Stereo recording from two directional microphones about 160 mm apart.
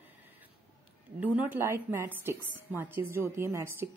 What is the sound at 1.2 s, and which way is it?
A woman's voice, 10° right (ahead or behind).